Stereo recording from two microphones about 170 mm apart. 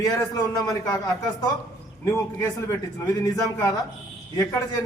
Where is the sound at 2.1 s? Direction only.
15° left (ahead or behind).